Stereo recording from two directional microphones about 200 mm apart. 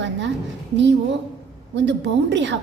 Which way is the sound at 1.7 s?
65° right (ahead or behind).